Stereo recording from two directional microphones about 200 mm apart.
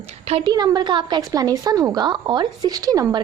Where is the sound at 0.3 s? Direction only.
30° right (ahead or behind).